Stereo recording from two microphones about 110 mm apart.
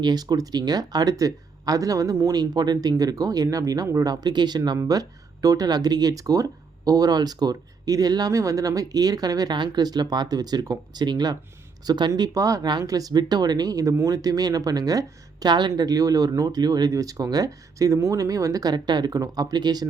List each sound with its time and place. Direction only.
0.0 s speech: 40° right (ahead or behind)